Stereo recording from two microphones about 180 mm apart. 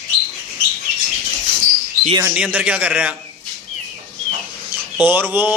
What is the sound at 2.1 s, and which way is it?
Speech, 20° right (ahead or behind).